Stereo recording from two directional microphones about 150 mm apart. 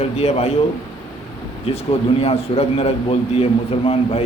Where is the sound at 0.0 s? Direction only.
45° left (ahead or behind).